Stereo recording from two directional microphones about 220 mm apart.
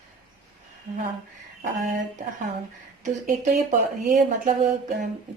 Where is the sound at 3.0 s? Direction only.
35° right (ahead or behind).